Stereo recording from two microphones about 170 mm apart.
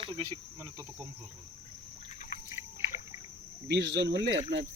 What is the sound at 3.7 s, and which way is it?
Speech, 90° right.